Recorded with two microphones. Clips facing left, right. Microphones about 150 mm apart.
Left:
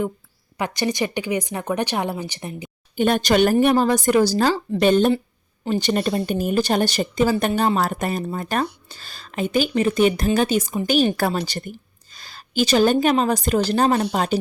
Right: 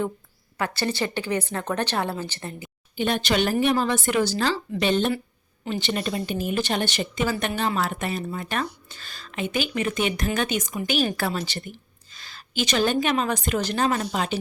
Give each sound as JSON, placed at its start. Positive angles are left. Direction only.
{"t": 0.5, "sound": "a woman's voice", "side_deg": 15}
{"t": 2.9, "sound": "speech", "side_deg": 50}